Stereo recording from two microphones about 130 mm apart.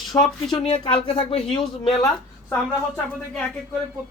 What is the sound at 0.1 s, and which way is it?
Speech, 25° left (ahead or behind).